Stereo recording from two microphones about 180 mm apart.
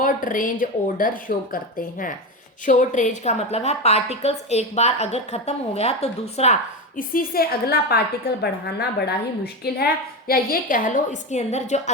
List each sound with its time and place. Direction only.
0.0 s a woman's voice: 50° left (ahead or behind)
2.6 s a woman's voice: 40° left (ahead or behind)